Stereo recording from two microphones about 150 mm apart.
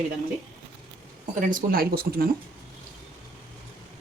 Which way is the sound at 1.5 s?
80° right.